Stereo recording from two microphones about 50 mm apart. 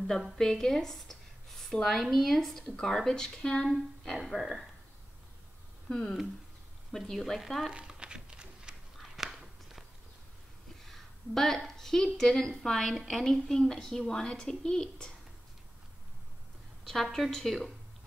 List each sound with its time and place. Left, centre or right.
0.4 s a woman's voice: centre
2.6 s a woman's voice: centre
5.9 s a woman's voice: centre
7.7 s a sound: centre
8.9 s biting: centre
10.9 s a woman's voice: centre
16.8 s speech: centre